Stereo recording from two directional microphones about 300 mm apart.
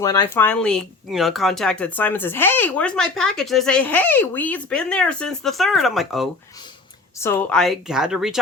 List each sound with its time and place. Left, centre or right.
0.0 s speech: centre